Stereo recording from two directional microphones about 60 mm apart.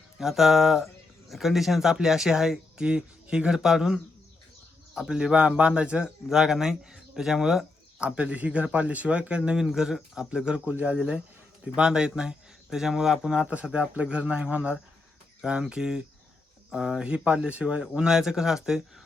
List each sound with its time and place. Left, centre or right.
0.2 s a sound: centre
1.3 s speech: centre
8.0 s speech: centre
9.5 s speech: centre
11.6 s speech: centre
15.7 s speech: centre
18.1 s speech: centre